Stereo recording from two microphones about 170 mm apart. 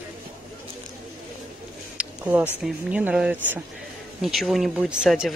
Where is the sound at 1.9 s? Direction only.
10° right (ahead or behind).